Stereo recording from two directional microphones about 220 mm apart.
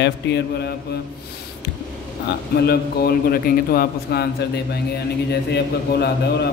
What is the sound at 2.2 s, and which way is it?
Speech, 50° left (ahead or behind).